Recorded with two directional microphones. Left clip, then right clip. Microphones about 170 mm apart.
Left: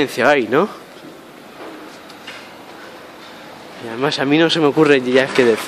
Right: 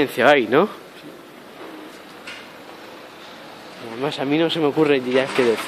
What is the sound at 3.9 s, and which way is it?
Speech, 15° left (ahead or behind).